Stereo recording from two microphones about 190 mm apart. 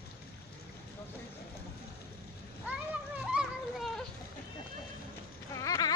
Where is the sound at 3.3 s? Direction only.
Centre (ahead or behind).